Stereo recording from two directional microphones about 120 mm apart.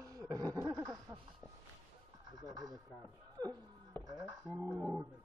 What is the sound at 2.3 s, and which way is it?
A man's voice, 30° right (ahead or behind).